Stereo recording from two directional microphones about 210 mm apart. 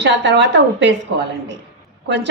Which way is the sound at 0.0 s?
55° right (ahead or behind).